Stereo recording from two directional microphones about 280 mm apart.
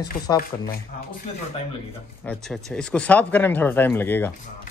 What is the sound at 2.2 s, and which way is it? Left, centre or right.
Speech, centre.